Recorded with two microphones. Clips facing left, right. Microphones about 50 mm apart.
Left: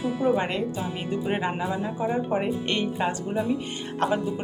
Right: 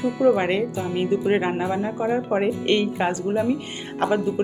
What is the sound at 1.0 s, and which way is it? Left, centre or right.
Speech, right.